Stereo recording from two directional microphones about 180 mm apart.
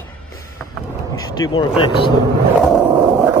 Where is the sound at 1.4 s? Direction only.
20° left (ahead or behind).